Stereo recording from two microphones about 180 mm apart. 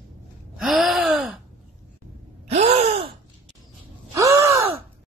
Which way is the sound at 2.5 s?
35° right (ahead or behind).